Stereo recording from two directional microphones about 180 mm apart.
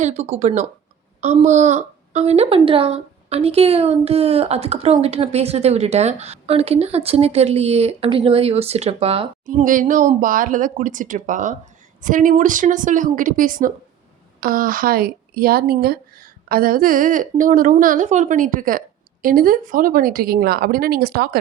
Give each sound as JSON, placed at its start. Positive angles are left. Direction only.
{"t": 0.0, "sound": "a woman's voice", "side_deg": -35}
{"t": 9.5, "sound": "a woman's voice", "side_deg": -45}